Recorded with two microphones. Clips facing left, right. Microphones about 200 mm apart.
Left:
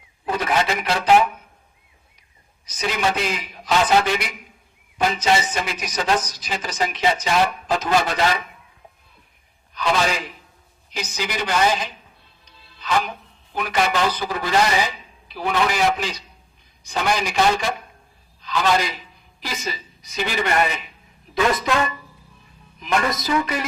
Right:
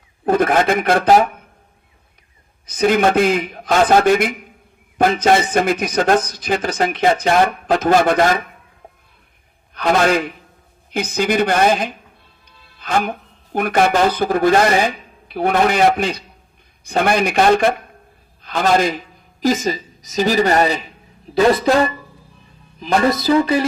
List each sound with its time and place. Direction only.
0.3 s a man's voice: 50° right (ahead or behind)
2.6 s a man's voice: 55° right (ahead or behind)
9.7 s a man's voice: 55° right (ahead or behind); by 20.9 s 35° right (ahead or behind)
21.3 s music: 35° right (ahead or behind)